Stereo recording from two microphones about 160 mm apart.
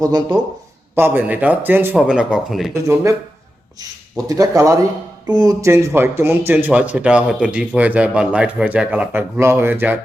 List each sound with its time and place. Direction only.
0.0 s speech: 25° right (ahead or behind)
0.9 s speech: 15° right (ahead or behind)
2.8 s speech: 20° right (ahead or behind)